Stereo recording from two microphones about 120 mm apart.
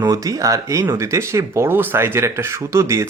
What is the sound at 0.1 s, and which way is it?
Speech, 30° right (ahead or behind).